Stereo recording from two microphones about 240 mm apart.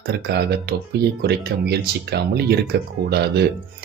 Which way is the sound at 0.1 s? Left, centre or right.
Right.